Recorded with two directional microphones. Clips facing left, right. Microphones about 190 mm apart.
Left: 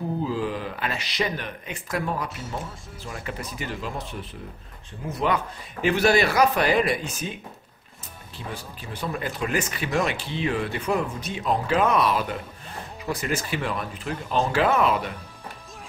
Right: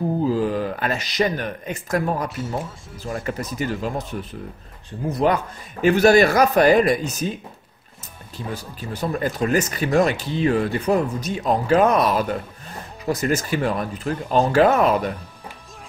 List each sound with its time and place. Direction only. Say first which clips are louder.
0.3 s a man's voice: right 6 dB; 45° right (ahead or behind)
5.2 s a man's voice: right 4 dB; 45° right (ahead or behind)
8.5 s a man's voice: right 5 dB; 40° right (ahead or behind)